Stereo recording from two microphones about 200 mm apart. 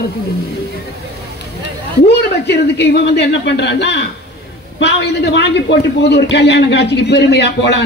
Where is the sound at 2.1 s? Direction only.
55° left (ahead or behind).